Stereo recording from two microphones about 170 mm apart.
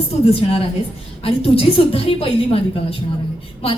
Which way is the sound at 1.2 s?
35° left (ahead or behind).